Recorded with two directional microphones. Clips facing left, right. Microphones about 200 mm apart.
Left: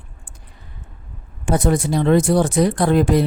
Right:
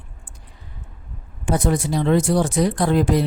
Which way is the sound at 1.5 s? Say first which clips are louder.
Left 2 dB; 55° left (ahead or behind).